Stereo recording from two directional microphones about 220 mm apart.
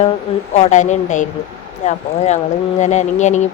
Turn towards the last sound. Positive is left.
turn(degrees=30)  # may be behind; listen again after turning